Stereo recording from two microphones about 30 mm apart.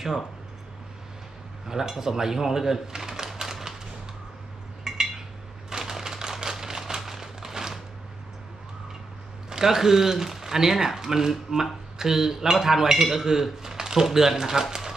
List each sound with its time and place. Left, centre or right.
1.6 s speech: centre
3.4 s typewriter: centre
4.8 s cutlery: centre
5.7 s a sound: centre
9.5 s speech: centre